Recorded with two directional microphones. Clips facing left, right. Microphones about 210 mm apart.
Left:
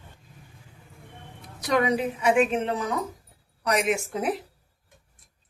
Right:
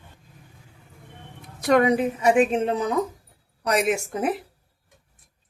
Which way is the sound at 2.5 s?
25° right (ahead or behind).